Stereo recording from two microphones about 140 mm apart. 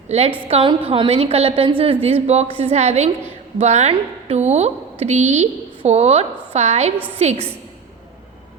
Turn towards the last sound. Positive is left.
turn(degrees=-45)  # may be behind; listen again after turning